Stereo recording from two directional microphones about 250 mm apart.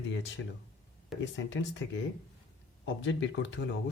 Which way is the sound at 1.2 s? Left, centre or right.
Left.